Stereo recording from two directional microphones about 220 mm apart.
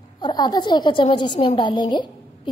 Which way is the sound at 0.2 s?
20° left (ahead or behind).